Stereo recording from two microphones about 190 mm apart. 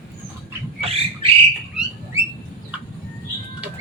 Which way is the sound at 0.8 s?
30° right (ahead or behind).